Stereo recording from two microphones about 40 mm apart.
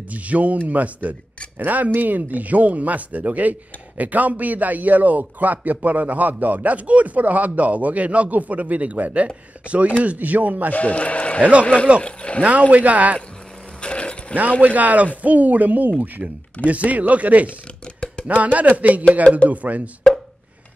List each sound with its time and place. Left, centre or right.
0.1 s a man's voice: right
10.7 s speech: left
12.0 s a sound: left
12.4 s a man's voice: right
13.7 s a sound: left
14.6 s a man's voice: right
16.2 s a man's voice: right